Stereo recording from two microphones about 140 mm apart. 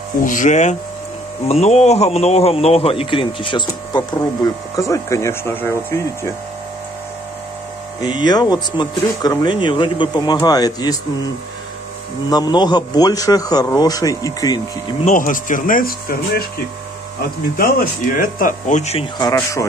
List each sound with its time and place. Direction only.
0.2 s speech: 65° left (ahead or behind)
1.4 s a man's voice: 45° left (ahead or behind); by 5.9 s 15° left (ahead or behind)
8.0 s a man's voice: 30° left (ahead or behind)
12.3 s speech: 30° left (ahead or behind)
15.0 s speech: 70° left (ahead or behind); by 16.4 s 90° left
17.6 s speech: 80° left; by 19.0 s 55° left (ahead or behind)
19.1 s speech: 30° left (ahead or behind)